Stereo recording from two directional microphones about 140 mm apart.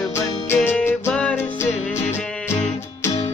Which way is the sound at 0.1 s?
20° left (ahead or behind).